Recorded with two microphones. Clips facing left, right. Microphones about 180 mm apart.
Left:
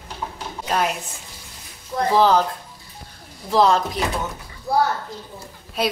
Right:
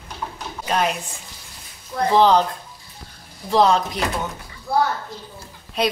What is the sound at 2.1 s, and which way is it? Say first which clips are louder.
Speech: right 1 dB; 5° left (ahead or behind).